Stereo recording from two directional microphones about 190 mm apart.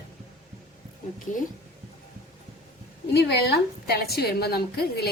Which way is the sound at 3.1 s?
60° left (ahead or behind).